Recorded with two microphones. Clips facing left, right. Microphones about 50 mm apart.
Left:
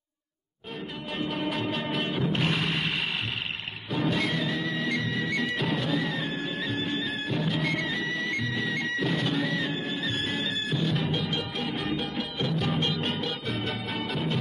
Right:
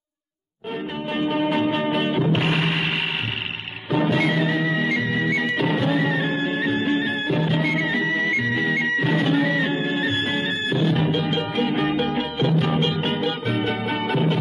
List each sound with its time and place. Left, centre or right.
1.1 s music: right
3.9 s music: right
11.5 s music: right